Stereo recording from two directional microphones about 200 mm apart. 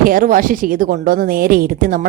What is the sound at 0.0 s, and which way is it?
A woman's voice, 45° right (ahead or behind).